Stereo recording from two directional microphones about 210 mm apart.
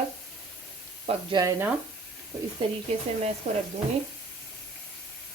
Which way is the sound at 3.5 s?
30° right (ahead or behind).